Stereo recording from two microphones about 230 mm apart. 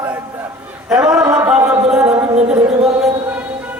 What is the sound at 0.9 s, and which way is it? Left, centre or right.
Speech, centre.